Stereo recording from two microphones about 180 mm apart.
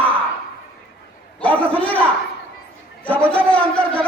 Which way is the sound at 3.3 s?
5° left (ahead or behind).